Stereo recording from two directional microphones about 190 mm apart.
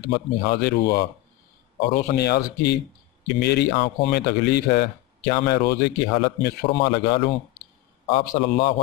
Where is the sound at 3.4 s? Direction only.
60° left (ahead or behind).